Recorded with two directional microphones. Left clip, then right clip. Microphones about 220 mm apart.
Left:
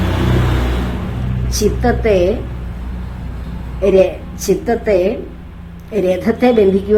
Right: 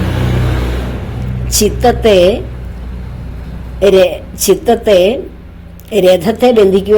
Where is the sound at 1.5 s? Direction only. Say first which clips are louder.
Right 5 dB; 35° right (ahead or behind).